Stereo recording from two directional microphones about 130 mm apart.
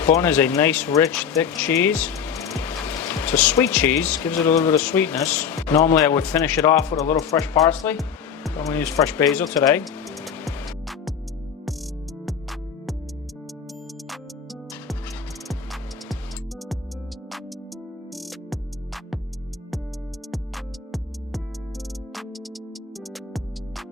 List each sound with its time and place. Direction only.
0.0 s speech: 15° left (ahead or behind)
12.2 s music: centre (ahead or behind)
15.4 s music: centre (ahead or behind)
18.1 s music: centre (ahead or behind)
22.1 s music: centre (ahead or behind)